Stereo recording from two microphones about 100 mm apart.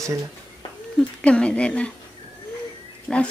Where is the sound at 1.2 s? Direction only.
10° left (ahead or behind).